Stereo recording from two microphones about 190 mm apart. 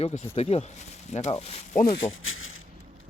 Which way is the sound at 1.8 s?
80° left.